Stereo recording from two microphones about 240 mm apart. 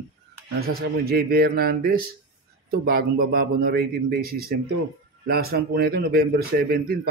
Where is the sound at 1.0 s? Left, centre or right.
Right.